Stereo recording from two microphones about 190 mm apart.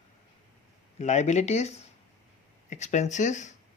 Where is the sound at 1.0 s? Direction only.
40° left (ahead or behind).